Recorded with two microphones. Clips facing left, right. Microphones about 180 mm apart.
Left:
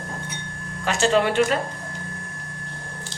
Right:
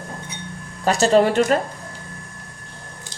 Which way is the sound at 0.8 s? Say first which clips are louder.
Right 4 dB; 40° right (ahead or behind).